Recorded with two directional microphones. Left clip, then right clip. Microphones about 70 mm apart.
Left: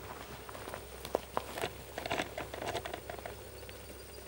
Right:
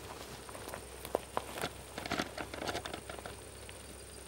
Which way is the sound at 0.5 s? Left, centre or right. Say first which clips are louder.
Left 2 dB; centre.